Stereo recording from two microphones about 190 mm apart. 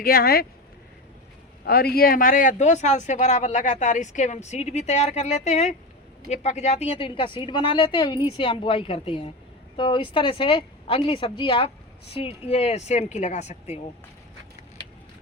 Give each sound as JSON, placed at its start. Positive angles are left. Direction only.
{"t": 0.0, "sound": "speech", "side_deg": 50}
{"t": 1.6, "sound": "speech", "side_deg": 55}